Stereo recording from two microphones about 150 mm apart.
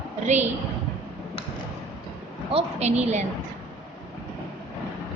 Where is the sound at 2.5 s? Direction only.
45° right (ahead or behind).